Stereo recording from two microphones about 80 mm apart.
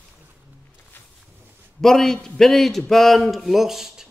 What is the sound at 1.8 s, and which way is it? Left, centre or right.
A man's voice, centre.